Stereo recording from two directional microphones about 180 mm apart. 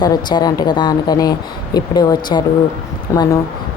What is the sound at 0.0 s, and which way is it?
Speech, 25° left (ahead or behind).